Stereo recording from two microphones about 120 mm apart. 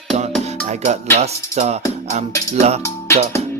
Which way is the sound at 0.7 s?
75° right (ahead or behind).